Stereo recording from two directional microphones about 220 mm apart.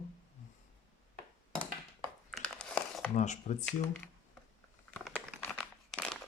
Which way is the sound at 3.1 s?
30° left (ahead or behind).